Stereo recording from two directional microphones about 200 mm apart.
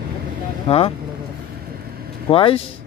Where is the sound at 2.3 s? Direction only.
25° left (ahead or behind).